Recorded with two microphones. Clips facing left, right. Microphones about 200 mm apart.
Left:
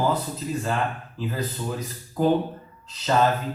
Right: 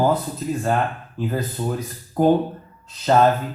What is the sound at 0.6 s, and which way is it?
Speech, 50° right (ahead or behind).